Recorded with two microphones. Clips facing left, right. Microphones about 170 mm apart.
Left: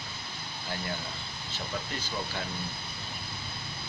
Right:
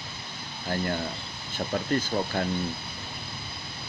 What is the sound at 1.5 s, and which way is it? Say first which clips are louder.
Speech: right 10 dB; 50° right (ahead or behind).